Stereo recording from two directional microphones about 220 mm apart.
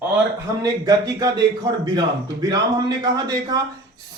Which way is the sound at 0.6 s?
15° right (ahead or behind).